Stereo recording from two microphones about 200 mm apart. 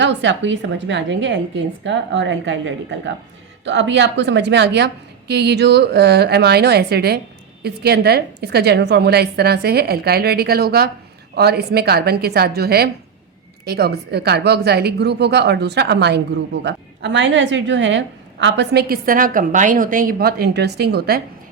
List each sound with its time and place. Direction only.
0.0 s a woman's voice: 65° right (ahead or behind)